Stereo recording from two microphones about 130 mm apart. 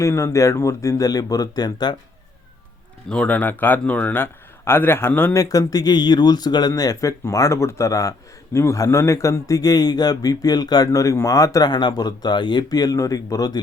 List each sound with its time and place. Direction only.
0.0 s a man's voice: 25° left (ahead or behind)
3.1 s a man's voice: 10° left (ahead or behind)
5.4 s a man's voice: 25° left (ahead or behind)